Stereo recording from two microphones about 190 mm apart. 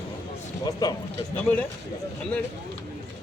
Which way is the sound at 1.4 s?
10° left (ahead or behind).